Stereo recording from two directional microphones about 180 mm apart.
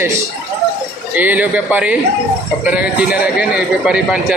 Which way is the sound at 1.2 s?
10° right (ahead or behind).